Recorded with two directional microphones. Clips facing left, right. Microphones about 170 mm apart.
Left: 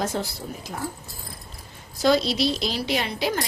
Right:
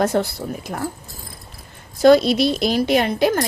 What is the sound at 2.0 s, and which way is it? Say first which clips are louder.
A woman's voice: right 8 dB; 55° right (ahead or behind).